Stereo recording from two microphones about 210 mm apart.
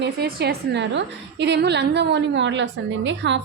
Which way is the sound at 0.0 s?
50° right (ahead or behind).